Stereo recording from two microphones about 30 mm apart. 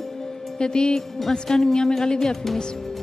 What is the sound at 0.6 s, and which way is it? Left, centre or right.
Speech, left.